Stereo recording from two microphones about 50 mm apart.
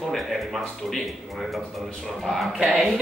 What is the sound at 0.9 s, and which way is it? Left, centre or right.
Speech, centre.